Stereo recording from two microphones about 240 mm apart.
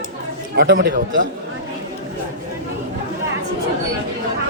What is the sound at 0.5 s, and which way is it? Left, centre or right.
Speech, right.